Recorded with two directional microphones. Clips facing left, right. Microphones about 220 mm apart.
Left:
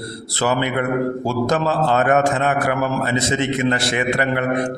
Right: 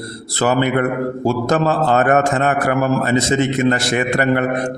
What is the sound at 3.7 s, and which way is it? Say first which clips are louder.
Speech: right 3 dB; 45° right (ahead or behind).